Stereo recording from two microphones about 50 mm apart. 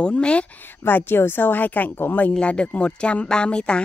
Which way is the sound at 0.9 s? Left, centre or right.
Left.